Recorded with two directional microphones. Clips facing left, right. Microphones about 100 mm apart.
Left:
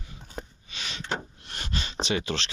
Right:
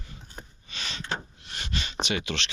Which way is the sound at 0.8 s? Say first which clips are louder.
Right 1 dB; 10° left (ahead or behind).